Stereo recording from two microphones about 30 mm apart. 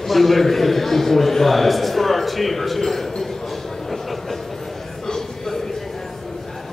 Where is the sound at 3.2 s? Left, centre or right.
Centre.